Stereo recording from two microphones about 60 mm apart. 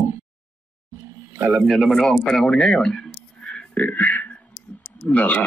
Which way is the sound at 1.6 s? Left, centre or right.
Centre.